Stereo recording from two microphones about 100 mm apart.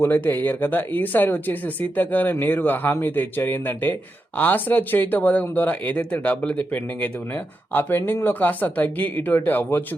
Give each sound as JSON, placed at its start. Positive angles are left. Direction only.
{"t": 0.0, "sound": "speech", "side_deg": 20}